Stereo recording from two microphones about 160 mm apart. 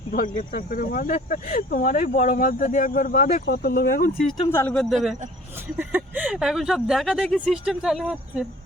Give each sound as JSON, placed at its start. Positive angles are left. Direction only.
{"t": 0.1, "sound": "speech", "side_deg": 60}
{"t": 4.5, "sound": "speech", "side_deg": 10}
{"t": 5.7, "sound": "speech", "side_deg": -10}